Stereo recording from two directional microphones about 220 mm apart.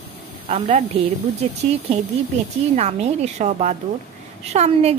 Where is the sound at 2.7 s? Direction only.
30° right (ahead or behind).